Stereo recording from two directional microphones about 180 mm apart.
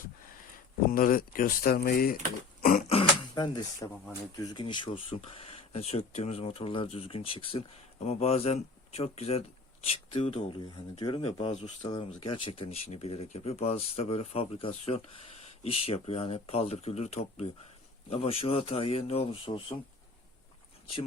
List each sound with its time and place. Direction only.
0.9 s speech: 50° left (ahead or behind)
2.6 s throat clearing: 50° left (ahead or behind)
2.8 s speech: 30° left (ahead or behind)
11.9 s speech: 25° left (ahead or behind)